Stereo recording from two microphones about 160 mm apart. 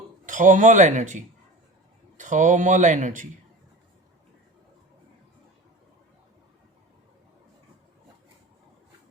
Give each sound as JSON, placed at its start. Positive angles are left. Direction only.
{"t": 0.3, "sound": "speech", "side_deg": -55}